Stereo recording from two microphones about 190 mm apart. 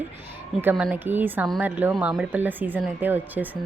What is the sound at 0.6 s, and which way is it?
A woman's voice, 10° right (ahead or behind).